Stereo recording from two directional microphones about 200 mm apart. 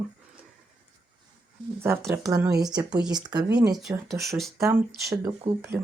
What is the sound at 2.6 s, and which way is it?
Speech, 20° right (ahead or behind).